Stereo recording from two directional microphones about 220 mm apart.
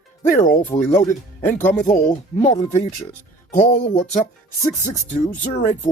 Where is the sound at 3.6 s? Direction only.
30° left (ahead or behind).